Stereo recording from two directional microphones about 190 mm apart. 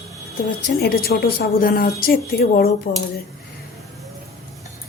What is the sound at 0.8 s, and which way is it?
A woman's voice, 55° left (ahead or behind).